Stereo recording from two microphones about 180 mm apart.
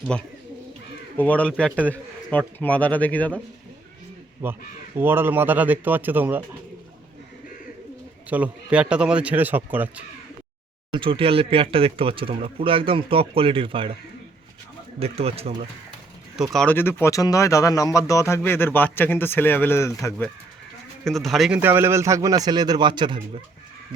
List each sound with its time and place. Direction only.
1.1 s a man's voice: 10° left (ahead or behind)
4.4 s speech: 10° right (ahead or behind)
8.3 s speech: 5° right (ahead or behind)
10.9 s speech: 30° right (ahead or behind)
14.9 s speech: 35° right (ahead or behind)
16.3 s speech: centre (ahead or behind)
21.0 s speech: centre (ahead or behind); by 23.4 s 25° right (ahead or behind)